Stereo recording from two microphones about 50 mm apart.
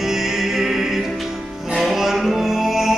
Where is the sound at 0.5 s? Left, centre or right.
Centre.